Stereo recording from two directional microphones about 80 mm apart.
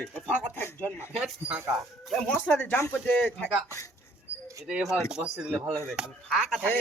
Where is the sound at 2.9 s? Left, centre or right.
Left.